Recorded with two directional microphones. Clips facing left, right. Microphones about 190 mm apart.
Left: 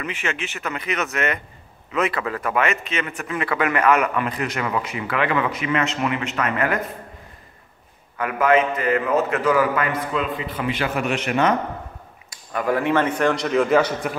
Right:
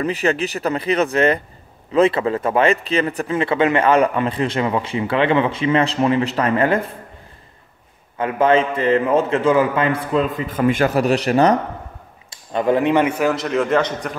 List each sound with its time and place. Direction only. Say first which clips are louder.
0.0 s speech: right 9 dB; 35° right (ahead or behind)
8.2 s speech: right 3 dB; 25° right (ahead or behind)
10.3 s speech: right 7 dB; 45° right (ahead or behind)
12.3 s a man's voice: right 5 dB; 25° right (ahead or behind); by 14.1 s 5° left (ahead or behind)